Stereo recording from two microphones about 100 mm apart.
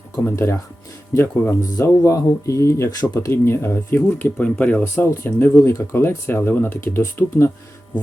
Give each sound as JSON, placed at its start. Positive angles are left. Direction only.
{"t": 0.3, "sound": "speech", "side_deg": 25}
{"t": 4.8, "sound": "speech", "side_deg": 25}